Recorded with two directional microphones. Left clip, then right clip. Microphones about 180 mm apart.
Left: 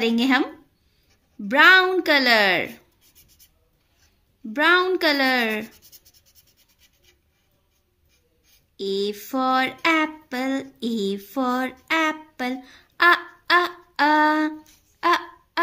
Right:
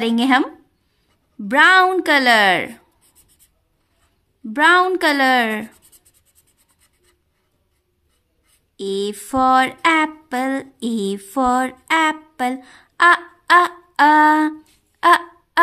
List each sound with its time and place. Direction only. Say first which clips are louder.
0.0 s a woman's voice: right 4 dB; 30° right (ahead or behind)
4.5 s a woman's voice: right 5 dB; 30° right (ahead or behind)
8.7 s a sound: right 2 dB; 30° right (ahead or behind)